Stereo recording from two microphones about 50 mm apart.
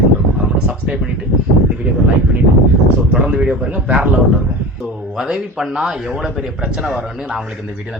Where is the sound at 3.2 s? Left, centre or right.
Centre.